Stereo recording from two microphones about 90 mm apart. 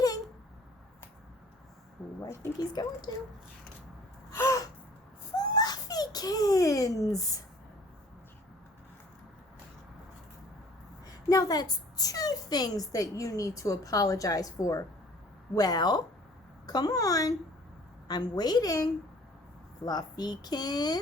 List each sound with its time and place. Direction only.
2.6 s speech: 50° left (ahead or behind)
4.4 s gasp: 35° left (ahead or behind)
5.3 s giggle: 45° left (ahead or behind)
11.0 s a woman's voice: 45° left (ahead or behind)